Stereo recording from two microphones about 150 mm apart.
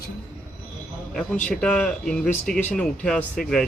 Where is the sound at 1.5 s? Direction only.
5° left (ahead or behind).